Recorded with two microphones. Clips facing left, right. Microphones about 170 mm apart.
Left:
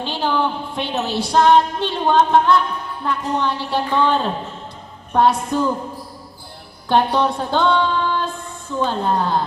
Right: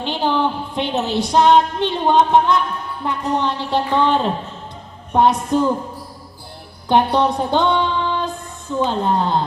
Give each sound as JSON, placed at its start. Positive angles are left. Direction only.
{"t": 0.0, "sound": "a woman's voice", "side_deg": -20}
{"t": 6.8, "sound": "female singing", "side_deg": -15}
{"t": 8.8, "sound": "a woman's voice", "side_deg": -20}